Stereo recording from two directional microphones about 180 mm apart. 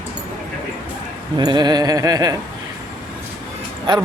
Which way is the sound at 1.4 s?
25° right (ahead or behind).